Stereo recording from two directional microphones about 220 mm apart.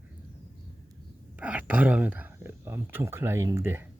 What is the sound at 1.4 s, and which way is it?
Speech, 5° right (ahead or behind).